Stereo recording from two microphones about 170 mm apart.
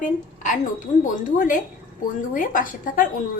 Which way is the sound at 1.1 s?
50° left (ahead or behind).